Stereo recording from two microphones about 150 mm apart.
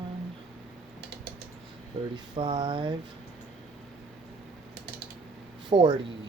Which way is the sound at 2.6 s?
35° right (ahead or behind).